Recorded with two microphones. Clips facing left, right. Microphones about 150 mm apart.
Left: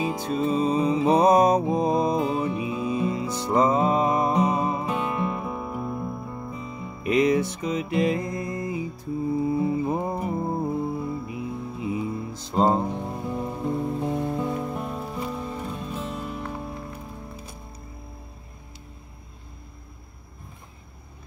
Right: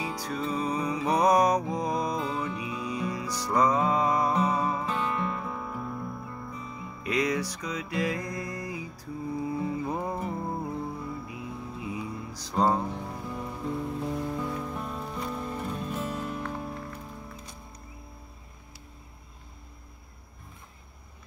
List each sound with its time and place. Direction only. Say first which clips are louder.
0.0 s music: left 7 dB; 25° left (ahead or behind); by 16.6 s 5° left (ahead or behind)